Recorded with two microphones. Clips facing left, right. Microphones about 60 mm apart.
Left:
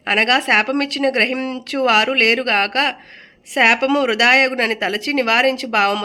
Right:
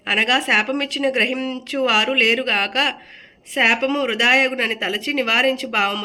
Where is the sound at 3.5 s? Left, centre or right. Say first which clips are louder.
Left 3 dB; left.